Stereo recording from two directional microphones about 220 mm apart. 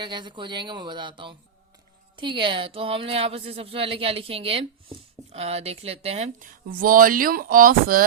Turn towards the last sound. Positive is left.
turn(degrees=-40)  # may be behind; listen again after turning